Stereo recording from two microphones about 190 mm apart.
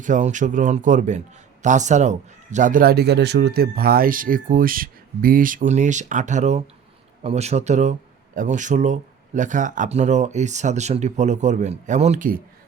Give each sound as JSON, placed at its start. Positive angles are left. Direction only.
{"t": 0.0, "sound": "a man's voice", "side_deg": -40}